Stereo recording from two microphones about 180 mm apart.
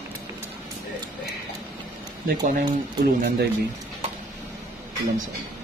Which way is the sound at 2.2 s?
55° right (ahead or behind).